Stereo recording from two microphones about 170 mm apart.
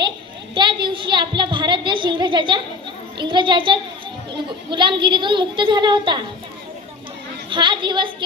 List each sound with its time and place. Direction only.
0.5 s a woman's voice: 25° right (ahead or behind)
7.5 s a woman's voice: 25° right (ahead or behind)